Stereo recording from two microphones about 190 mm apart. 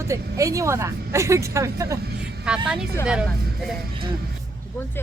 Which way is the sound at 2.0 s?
60° right (ahead or behind).